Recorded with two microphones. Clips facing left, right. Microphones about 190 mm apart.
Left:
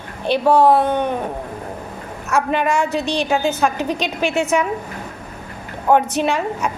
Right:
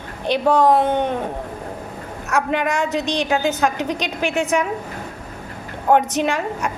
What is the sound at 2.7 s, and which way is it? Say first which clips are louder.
A woman's voice: left 2 dB; 20° right (ahead or behind).